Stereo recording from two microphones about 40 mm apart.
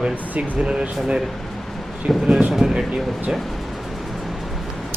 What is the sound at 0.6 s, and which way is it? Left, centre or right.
Speech, right.